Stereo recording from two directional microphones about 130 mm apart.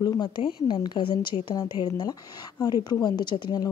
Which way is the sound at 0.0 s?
35° left (ahead or behind).